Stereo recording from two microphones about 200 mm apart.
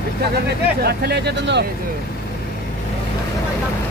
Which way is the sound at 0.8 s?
55° right (ahead or behind).